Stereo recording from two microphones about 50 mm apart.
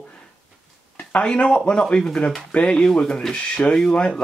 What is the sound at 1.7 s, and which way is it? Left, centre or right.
Speech, centre.